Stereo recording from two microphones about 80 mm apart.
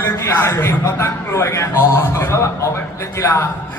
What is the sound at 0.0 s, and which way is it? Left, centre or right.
A man's voice, left.